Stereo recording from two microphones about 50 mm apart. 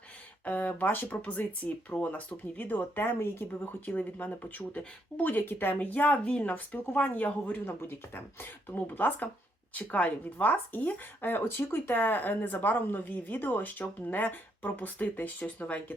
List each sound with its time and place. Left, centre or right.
0.4 s speech: left
7.6 s speech: left